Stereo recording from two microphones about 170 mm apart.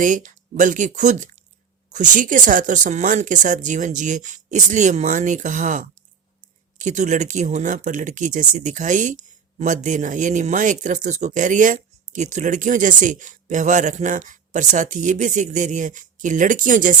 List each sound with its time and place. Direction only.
0.0 s speech: 50° right (ahead or behind)